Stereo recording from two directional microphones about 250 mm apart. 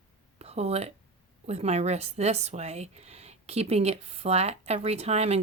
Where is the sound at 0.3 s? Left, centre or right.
Right.